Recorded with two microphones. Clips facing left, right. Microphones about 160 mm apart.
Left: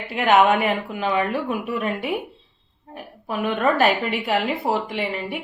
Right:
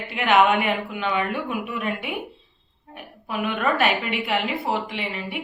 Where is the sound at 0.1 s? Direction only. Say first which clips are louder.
Left 2 dB; 40° left (ahead or behind).